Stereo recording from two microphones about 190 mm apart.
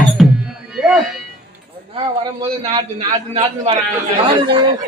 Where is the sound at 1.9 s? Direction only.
30° right (ahead or behind).